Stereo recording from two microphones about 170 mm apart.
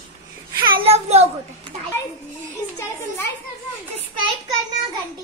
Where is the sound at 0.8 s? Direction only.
40° right (ahead or behind).